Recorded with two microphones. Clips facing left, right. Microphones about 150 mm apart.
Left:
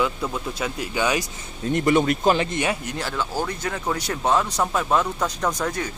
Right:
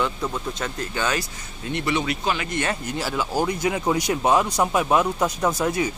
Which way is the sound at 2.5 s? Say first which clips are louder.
Left 1 dB; 15° left (ahead or behind).